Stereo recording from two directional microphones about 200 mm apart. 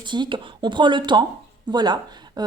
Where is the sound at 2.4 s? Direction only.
20° right (ahead or behind).